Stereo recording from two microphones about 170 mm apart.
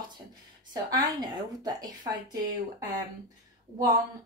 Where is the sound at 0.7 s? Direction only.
25° right (ahead or behind).